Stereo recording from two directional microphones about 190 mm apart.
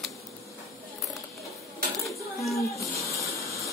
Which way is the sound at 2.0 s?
Centre (ahead or behind).